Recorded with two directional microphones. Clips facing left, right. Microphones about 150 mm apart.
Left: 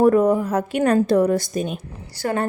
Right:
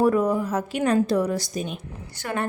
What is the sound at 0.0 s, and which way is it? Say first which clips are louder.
A woman's voice: left 5 dB; 50° left (ahead or behind).